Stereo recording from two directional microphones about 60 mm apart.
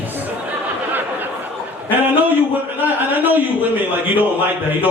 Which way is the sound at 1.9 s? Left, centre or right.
Right.